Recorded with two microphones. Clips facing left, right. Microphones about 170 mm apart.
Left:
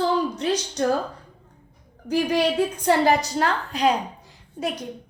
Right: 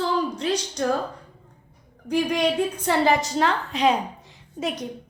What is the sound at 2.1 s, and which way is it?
Speech, 35° left (ahead or behind).